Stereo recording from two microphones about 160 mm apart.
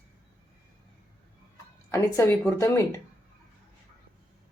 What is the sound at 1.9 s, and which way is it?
Speech, 15° left (ahead or behind).